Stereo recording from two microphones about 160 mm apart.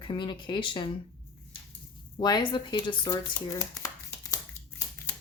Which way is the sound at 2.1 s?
25° left (ahead or behind).